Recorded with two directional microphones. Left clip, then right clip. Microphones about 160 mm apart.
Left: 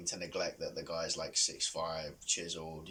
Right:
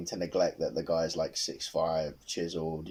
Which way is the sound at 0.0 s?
45° right (ahead or behind).